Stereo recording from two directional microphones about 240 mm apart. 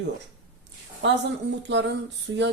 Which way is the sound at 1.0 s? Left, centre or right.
Right.